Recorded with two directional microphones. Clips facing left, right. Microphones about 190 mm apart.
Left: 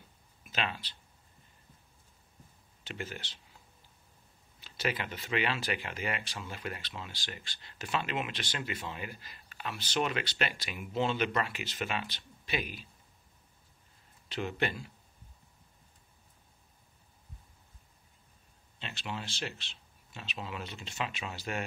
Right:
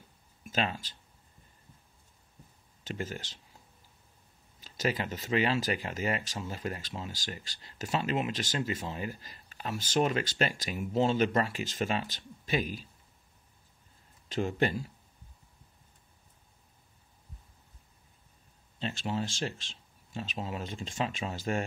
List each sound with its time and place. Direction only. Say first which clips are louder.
0.5 s speech: right 4 dB; 40° right (ahead or behind)
2.8 s speech: right 4 dB; 45° right (ahead or behind)
4.6 s speech: right 3 dB; 40° right (ahead or behind)
14.3 s speech: right 5 dB; 40° right (ahead or behind)
18.8 s speech: right 7 dB; 40° right (ahead or behind)